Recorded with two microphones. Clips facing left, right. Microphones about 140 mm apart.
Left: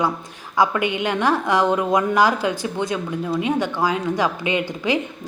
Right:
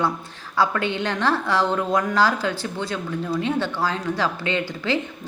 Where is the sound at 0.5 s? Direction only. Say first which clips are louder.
Left 2 dB; 15° left (ahead or behind).